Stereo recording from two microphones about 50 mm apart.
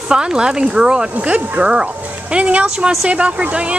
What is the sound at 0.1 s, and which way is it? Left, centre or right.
Speech, centre.